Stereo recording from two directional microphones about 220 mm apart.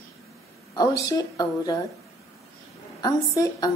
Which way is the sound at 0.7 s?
15° left (ahead or behind).